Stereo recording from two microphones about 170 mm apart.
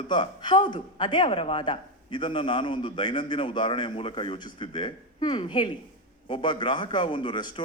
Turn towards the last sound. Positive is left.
turn(degrees=30)  # may be behind; listen again after turning